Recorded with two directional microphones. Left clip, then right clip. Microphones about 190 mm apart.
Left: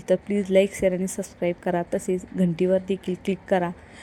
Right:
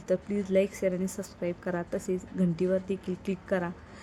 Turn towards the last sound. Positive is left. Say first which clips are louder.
# left 7 dB
turn(degrees=20)  # may be behind; listen again after turning